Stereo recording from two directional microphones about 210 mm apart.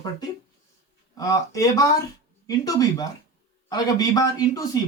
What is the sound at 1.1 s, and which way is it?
A woman's voice, 15° left (ahead or behind).